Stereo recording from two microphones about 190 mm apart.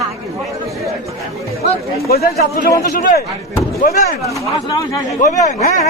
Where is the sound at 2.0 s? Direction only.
55° left (ahead or behind).